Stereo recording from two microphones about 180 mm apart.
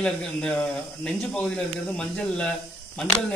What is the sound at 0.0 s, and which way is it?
Speech, 5° left (ahead or behind).